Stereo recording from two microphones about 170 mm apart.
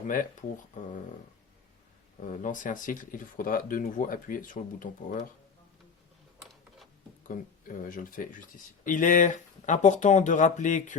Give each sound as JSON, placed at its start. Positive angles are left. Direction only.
{"t": 0.0, "sound": "speech", "side_deg": 50}
{"t": 2.2, "sound": "speech", "side_deg": 50}
{"t": 6.4, "sound": "a sound", "side_deg": 0}
{"t": 7.3, "sound": "speech", "side_deg": 50}